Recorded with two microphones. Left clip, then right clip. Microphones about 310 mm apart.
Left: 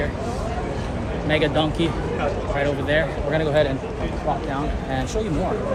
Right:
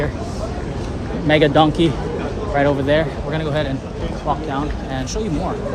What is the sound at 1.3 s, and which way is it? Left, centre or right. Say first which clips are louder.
Speech: right 7 dB; right.